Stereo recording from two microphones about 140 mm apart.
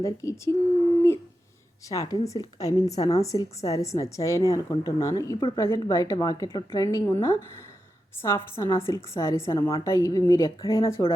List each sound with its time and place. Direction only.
0.0 s a woman's voice: 20° left (ahead or behind)
1.9 s a woman's voice: 25° left (ahead or behind)